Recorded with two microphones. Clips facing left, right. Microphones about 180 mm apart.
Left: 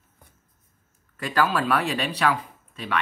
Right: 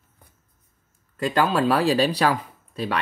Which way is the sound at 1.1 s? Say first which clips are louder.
Right 3 dB; 30° right (ahead or behind).